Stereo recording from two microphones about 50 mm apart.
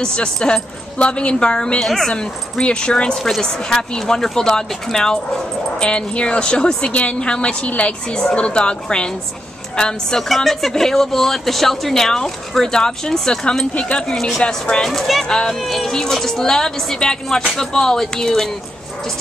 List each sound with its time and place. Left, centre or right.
0.0 s a woman's voice: centre
10.2 s a man's voice: centre
15.2 s a man's voice: centre
15.5 s a man's voice: centre